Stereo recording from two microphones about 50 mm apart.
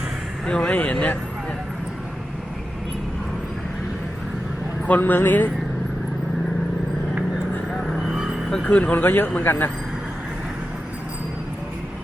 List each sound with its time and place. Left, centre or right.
0.4 s speech: centre
0.7 s speech: left
4.9 s speech: left
7.7 s vehicle: centre
8.6 s speech: left